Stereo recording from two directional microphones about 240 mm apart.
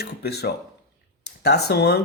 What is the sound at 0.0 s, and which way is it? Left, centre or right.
Speech, left.